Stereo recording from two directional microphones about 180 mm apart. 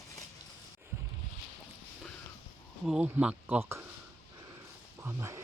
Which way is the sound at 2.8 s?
5° right (ahead or behind).